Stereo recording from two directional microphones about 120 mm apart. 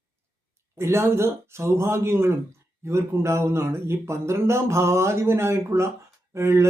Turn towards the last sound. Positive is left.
turn(degrees=-20)  # may be behind; listen again after turning